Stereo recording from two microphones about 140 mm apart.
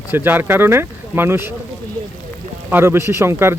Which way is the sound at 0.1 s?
15° right (ahead or behind).